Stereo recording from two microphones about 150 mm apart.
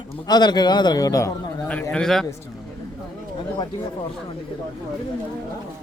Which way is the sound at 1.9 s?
5° left (ahead or behind).